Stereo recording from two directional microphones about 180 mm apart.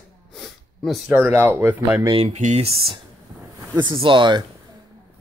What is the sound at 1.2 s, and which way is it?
Speech, 15° right (ahead or behind).